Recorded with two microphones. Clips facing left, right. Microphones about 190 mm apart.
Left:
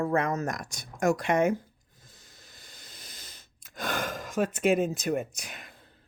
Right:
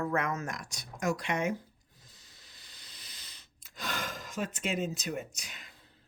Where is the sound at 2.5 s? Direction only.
50° left (ahead or behind).